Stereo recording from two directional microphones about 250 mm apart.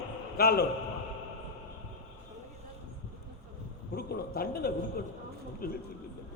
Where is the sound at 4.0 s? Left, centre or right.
Left.